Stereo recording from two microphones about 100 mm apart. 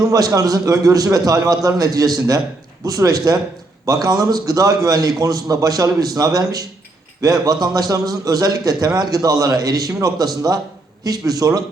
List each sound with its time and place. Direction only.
0.0 s a man's voice: 35° right (ahead or behind)